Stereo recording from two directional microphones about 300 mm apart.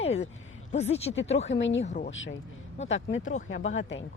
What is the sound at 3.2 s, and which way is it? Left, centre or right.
Speech, left.